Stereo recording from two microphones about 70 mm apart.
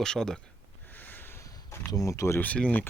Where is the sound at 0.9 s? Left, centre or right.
Left.